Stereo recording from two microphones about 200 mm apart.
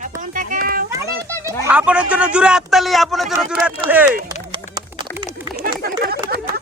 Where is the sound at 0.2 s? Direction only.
40° right (ahead or behind).